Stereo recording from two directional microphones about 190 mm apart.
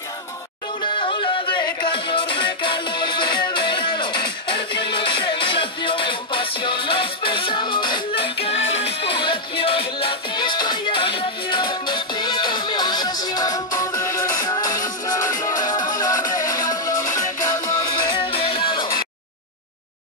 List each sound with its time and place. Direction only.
0.9 s music: 25° left (ahead or behind)